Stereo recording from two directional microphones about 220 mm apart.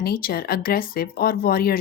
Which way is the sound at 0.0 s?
40° left (ahead or behind).